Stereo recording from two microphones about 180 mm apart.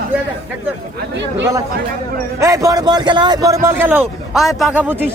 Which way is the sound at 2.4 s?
20° right (ahead or behind).